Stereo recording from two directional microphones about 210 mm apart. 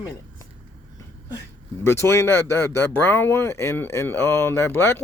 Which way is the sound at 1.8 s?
10° left (ahead or behind).